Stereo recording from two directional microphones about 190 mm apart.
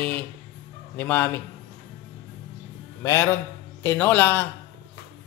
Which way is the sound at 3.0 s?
15° left (ahead or behind).